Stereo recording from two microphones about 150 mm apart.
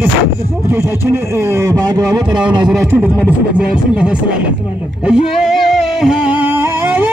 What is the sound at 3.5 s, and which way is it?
Speech, 5° right (ahead or behind).